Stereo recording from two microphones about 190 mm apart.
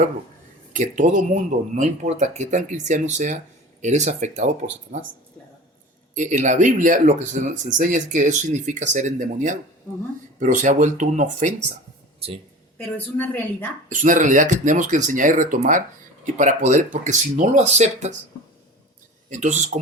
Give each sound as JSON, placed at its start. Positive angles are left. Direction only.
{"t": 0.7, "sound": "speech", "side_deg": -40}
{"t": 6.1, "sound": "speech", "side_deg": -40}
{"t": 13.1, "sound": "a woman's voice", "side_deg": 10}
{"t": 13.9, "sound": "speech", "side_deg": -40}
{"t": 19.3, "sound": "speech", "side_deg": -40}